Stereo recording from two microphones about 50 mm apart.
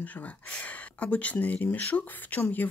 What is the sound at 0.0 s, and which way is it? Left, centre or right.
Speech, left.